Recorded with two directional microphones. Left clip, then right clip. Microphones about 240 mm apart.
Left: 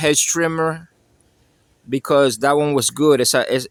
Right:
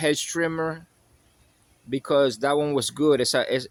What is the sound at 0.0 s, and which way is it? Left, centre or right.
Speech, left.